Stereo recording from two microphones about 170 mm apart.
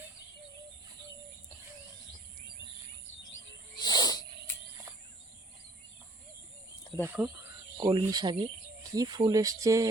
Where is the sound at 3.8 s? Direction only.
25° left (ahead or behind).